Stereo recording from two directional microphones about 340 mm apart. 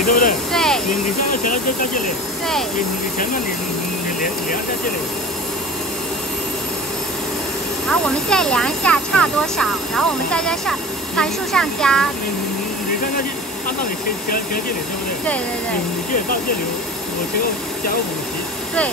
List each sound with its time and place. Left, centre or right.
0.0 s speech: left
0.5 s speech: centre
1.4 s speech: left
7.9 s speech: centre
16.1 s speech: left